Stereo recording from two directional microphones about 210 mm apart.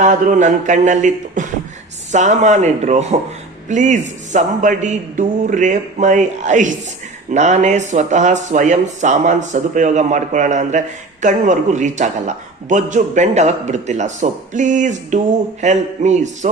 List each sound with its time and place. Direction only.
0.0 s speech: 35° right (ahead or behind)